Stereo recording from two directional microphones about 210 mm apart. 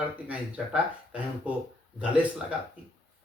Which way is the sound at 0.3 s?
5° right (ahead or behind).